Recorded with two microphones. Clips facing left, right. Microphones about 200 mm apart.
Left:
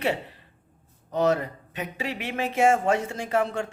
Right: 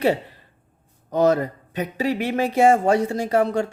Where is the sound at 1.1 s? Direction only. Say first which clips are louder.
Right 5 dB; 40° right (ahead or behind).